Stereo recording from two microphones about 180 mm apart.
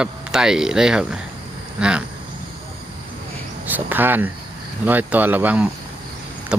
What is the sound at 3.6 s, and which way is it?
Speech, 10° right (ahead or behind).